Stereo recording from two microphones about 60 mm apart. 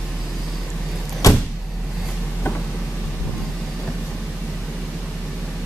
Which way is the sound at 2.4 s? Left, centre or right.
Left.